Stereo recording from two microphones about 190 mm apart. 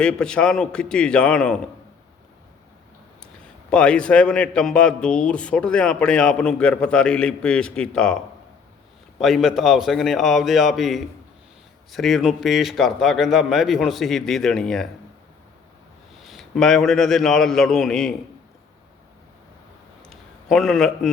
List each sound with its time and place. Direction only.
0.0 s a man's voice: 5° left (ahead or behind)
3.7 s a man's voice: 5° left (ahead or behind)
16.2 s a man's voice: centre (ahead or behind)
20.1 s a sound: centre (ahead or behind)